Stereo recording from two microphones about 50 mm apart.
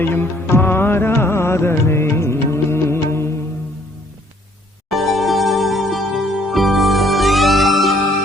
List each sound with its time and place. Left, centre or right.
0.1 s music: left
1.1 s music: left
4.9 s music: centre